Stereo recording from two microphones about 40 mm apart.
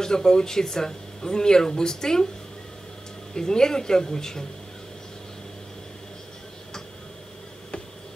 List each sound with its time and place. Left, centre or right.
0.0 s speech: centre
3.3 s speech: centre